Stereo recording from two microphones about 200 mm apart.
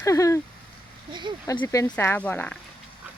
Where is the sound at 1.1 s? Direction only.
25° right (ahead or behind).